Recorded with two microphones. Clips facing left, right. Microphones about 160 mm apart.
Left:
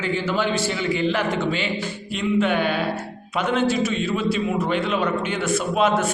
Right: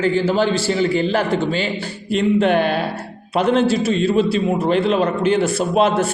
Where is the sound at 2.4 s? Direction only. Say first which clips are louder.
Right 4 dB; 40° right (ahead or behind).